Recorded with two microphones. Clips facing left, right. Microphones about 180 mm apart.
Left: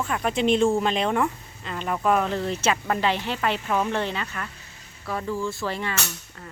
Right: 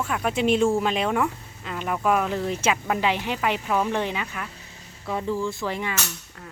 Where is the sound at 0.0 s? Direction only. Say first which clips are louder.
Even; 5° right (ahead or behind).